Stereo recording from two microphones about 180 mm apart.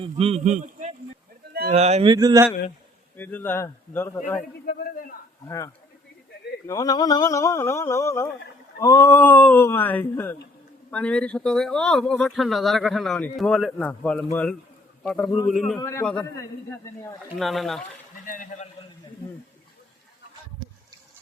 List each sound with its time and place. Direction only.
0.0 s a man's voice: 35° right (ahead or behind)
2.1 s speech: 20° right (ahead or behind)
3.2 s a sound: 10° left (ahead or behind)
4.6 s a man's voice: 55° left (ahead or behind)
5.5 s a sound: 15° left (ahead or behind)
10.9 s speech: 5° left (ahead or behind)
15.8 s a sound: 15° left (ahead or behind)
17.3 s speech: centre (ahead or behind)
18.3 s a man's voice: 50° left (ahead or behind)